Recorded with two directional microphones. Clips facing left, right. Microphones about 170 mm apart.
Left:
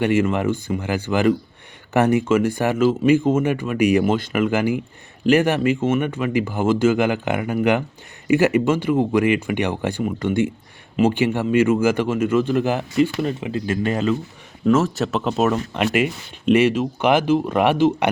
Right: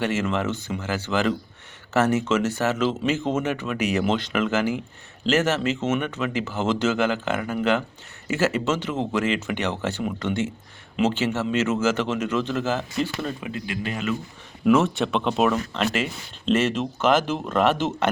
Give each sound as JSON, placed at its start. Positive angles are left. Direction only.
{"t": 0.2, "sound": "speech", "side_deg": 10}
{"t": 13.7, "sound": "speech", "side_deg": 40}
{"t": 14.7, "sound": "speech", "side_deg": 0}